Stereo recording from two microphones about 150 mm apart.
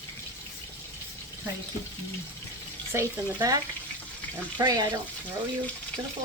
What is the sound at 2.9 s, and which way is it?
Speech, 20° right (ahead or behind).